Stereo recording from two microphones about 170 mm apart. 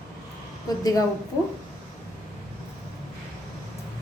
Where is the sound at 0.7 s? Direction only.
20° left (ahead or behind).